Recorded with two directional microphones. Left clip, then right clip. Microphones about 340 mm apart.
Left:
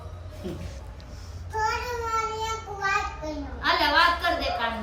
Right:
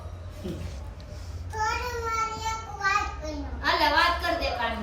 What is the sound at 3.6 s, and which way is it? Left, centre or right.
Speech, centre.